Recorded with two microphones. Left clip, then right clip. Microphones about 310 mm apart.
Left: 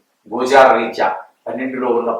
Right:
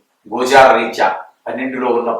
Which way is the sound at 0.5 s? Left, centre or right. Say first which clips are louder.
Right 1 dB; centre.